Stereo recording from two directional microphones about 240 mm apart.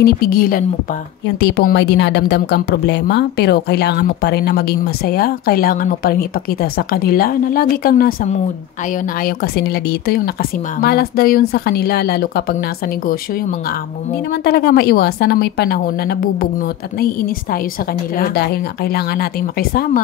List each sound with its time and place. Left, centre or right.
0.0 s a woman's voice: left
14.4 s a woman's voice: left
18.1 s a woman's voice: left